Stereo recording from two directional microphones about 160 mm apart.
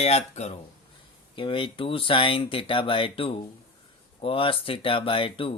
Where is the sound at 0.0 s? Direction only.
40° left (ahead or behind).